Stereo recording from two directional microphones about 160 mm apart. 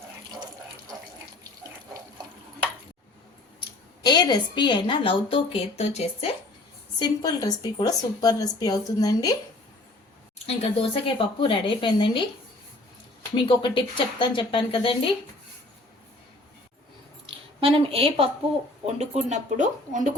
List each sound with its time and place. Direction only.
3.6 s speech: 30° left (ahead or behind)
7.0 s a woman's voice: 25° left (ahead or behind)
10.3 s speech: 40° left (ahead or behind)
13.3 s speech: 30° left (ahead or behind)
17.2 s a woman's voice: 35° right (ahead or behind)